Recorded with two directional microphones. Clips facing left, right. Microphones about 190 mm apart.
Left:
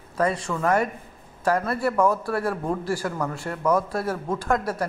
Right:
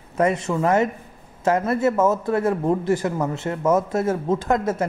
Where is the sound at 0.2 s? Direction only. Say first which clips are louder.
Right 4 dB; 25° right (ahead or behind).